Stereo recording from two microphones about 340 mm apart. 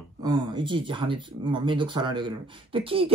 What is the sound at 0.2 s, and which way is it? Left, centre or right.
Speech, centre.